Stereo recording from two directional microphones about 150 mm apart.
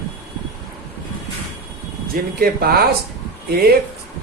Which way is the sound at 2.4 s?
90° right.